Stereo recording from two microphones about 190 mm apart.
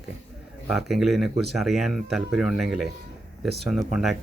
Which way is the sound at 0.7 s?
Centre (ahead or behind).